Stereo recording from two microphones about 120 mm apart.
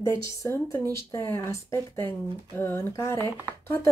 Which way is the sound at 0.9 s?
25° left (ahead or behind).